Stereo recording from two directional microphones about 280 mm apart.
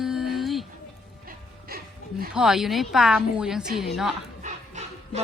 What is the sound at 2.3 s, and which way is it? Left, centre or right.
A woman's voice, centre.